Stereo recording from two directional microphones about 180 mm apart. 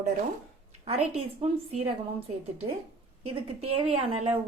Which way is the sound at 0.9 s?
35° right (ahead or behind).